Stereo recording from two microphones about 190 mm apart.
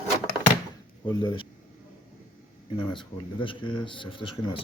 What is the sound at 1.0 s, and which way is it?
Speech, 20° left (ahead or behind).